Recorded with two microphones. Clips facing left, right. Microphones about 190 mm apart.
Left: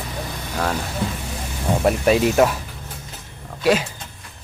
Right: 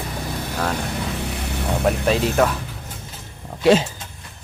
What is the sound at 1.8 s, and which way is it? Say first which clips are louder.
Speech: left 3 dB; 5° left (ahead or behind).